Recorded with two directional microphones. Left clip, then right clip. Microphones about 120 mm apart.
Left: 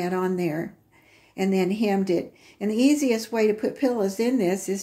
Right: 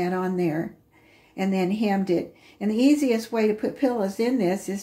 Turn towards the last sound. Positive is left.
turn(degrees=35)  # may be behind; listen again after turning